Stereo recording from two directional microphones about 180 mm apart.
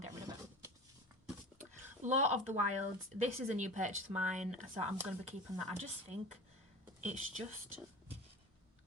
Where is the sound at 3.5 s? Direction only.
40° right (ahead or behind).